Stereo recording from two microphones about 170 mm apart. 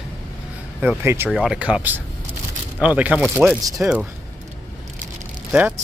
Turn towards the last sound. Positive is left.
turn(degrees=-10)  # may be behind; listen again after turning